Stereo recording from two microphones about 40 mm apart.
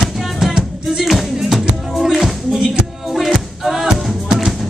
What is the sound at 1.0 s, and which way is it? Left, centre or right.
Music, centre.